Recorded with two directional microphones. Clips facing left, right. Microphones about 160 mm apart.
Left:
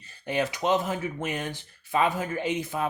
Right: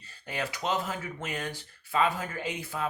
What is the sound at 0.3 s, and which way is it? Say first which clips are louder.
Speech: left 7 dB; 20° left (ahead or behind).